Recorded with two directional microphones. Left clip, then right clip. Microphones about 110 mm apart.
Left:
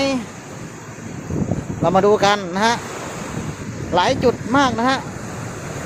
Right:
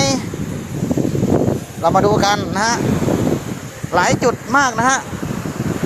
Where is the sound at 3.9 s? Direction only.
45° left (ahead or behind).